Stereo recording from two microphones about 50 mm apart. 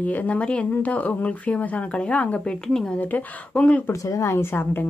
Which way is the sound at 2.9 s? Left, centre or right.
Left.